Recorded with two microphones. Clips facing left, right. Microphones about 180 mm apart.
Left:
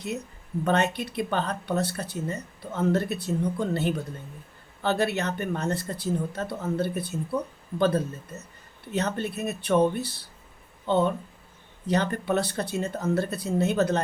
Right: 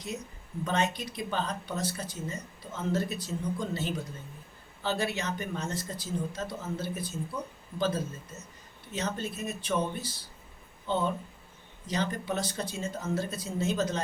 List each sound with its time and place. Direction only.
0.6 s speech: 60° left (ahead or behind)